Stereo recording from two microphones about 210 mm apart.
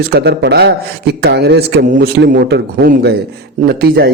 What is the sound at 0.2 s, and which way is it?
Speech, 50° right (ahead or behind).